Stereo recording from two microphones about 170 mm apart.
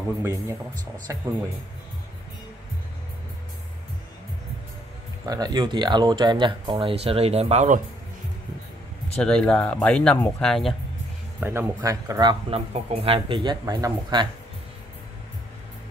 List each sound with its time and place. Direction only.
0.2 s speech: 15° right (ahead or behind)
5.2 s speech: 20° right (ahead or behind); by 7.8 s 45° right (ahead or behind)
9.2 s speech: 5° left (ahead or behind)
11.3 s speech: 10° right (ahead or behind)
12.5 s speech: 35° right (ahead or behind)